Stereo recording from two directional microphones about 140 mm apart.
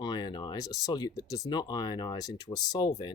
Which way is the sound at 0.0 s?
30° left (ahead or behind).